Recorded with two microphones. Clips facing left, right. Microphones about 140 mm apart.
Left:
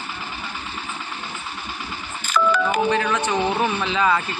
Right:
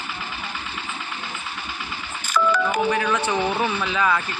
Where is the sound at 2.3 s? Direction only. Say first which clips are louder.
Left 1 dB; 55° left (ahead or behind).